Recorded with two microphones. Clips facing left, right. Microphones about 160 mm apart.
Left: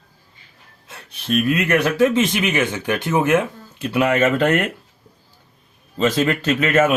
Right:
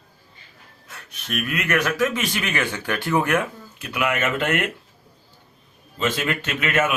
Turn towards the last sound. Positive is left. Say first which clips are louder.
# left 6 dB
turn(degrees=35)  # may be behind; listen again after turning